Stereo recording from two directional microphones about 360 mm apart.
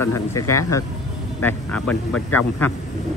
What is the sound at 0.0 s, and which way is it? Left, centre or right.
Speech, centre.